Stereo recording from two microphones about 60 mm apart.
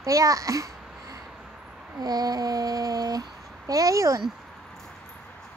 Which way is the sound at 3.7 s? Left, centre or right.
Right.